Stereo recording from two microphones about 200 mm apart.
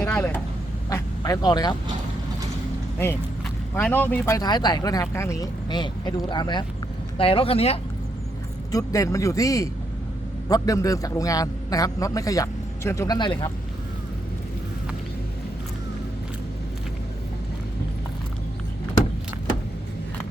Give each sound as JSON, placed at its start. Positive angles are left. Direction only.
{"t": 0.0, "sound": "vehicle", "side_deg": 10}
{"t": 0.9, "sound": "quack", "side_deg": 15}
{"t": 3.8, "sound": "speech", "side_deg": 10}
{"t": 8.7, "sound": "a man's voice", "side_deg": 15}